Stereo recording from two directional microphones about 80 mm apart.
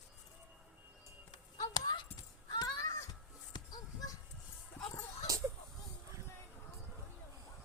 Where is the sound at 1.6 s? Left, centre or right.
Left.